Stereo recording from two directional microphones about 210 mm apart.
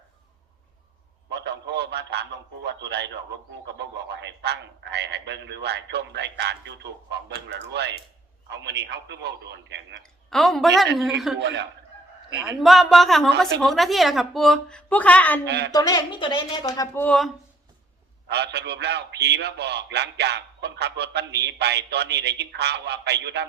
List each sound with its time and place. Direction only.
1.3 s a man's voice: 55° right (ahead or behind)
10.0 s a woman's voice: centre (ahead or behind)
11.3 s speech: 55° right (ahead or behind)
12.5 s a woman's voice: centre (ahead or behind)
15.4 s speech: 55° right (ahead or behind)
15.7 s speech: 20° left (ahead or behind)
18.3 s a man's voice: 55° right (ahead or behind)